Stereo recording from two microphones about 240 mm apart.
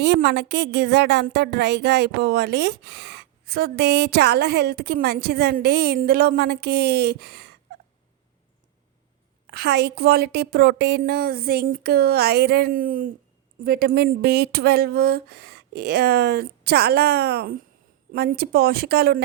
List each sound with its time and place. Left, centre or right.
0.0 s a woman's voice: right
9.5 s a woman's voice: right